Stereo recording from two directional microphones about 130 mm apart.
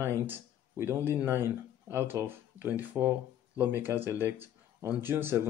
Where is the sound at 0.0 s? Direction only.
20° right (ahead or behind).